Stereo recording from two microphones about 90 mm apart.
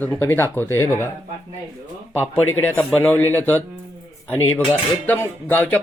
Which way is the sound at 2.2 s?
25° left (ahead or behind).